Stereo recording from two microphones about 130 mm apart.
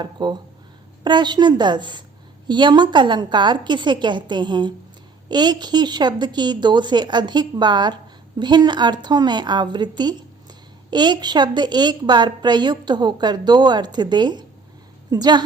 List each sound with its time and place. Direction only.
0.0 s a woman's voice: 35° right (ahead or behind)